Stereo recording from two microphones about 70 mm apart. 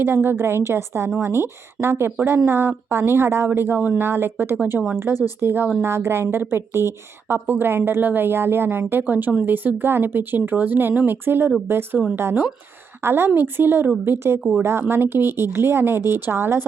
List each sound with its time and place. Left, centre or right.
0.0 s a woman's voice: right
4.5 s a woman's voice: right